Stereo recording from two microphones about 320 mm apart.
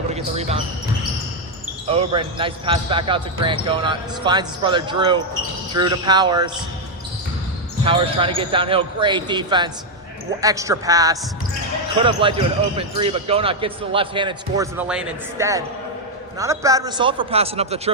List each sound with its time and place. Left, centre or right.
0.1 s speech: centre
1.9 s speech: centre
7.9 s speech: centre